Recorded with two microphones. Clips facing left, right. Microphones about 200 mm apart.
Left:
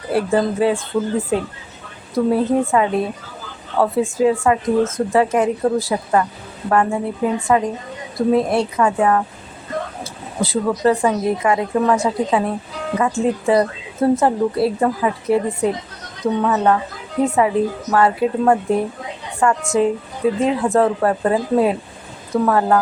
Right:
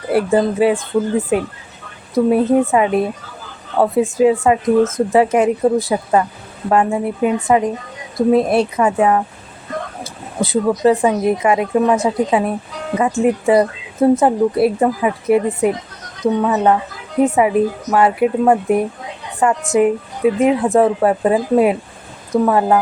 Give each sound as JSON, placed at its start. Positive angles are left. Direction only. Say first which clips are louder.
{"t": 0.1, "sound": "speech", "louder": "right 3 dB", "side_deg": -20}
{"t": 2.3, "sound": "speech", "louder": "right 3 dB", "side_deg": -20}
{"t": 10.4, "sound": "a woman's voice", "louder": "right 3 dB", "side_deg": -20}